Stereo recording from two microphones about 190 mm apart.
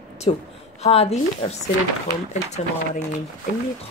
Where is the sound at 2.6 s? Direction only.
40° left (ahead or behind).